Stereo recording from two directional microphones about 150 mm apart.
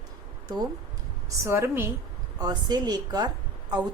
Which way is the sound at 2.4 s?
25° right (ahead or behind).